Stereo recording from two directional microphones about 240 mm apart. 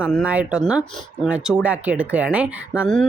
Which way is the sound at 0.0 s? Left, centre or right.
Centre.